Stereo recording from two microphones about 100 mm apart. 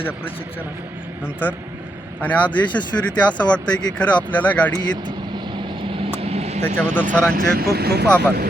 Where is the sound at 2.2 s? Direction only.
15° left (ahead or behind).